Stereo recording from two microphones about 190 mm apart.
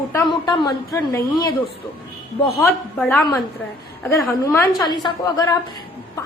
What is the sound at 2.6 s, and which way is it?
A woman's voice, 5° left (ahead or behind).